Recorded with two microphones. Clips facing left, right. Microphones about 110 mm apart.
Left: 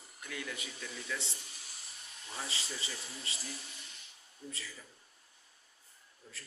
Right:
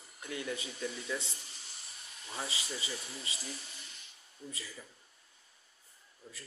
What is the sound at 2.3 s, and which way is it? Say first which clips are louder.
Speech: right 2 dB; 15° right (ahead or behind).